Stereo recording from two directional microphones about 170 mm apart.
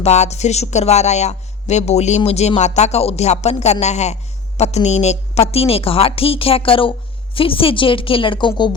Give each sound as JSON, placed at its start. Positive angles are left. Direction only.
{"t": 0.0, "sound": "a woman's voice", "side_deg": 40}